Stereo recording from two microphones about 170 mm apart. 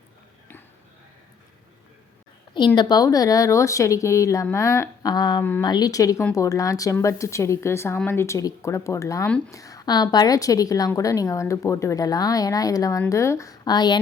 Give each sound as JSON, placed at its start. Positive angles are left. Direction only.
{"t": 2.7, "sound": "a woman's voice", "side_deg": 20}
{"t": 5.4, "sound": "speech", "side_deg": 10}
{"t": 5.6, "sound": "a woman's voice", "side_deg": 25}